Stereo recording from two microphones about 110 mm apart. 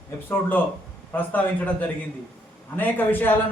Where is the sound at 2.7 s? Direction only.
15° left (ahead or behind).